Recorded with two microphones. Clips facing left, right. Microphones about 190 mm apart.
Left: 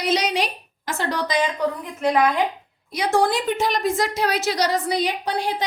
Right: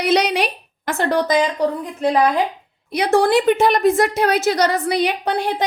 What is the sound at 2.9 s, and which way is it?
A woman's voice, 65° right (ahead or behind).